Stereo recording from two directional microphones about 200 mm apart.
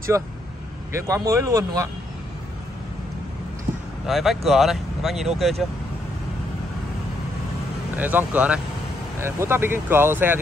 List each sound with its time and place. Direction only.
0.1 s speech: 15° right (ahead or behind)
4.0 s speech: centre (ahead or behind)
7.9 s speech: 10° right (ahead or behind)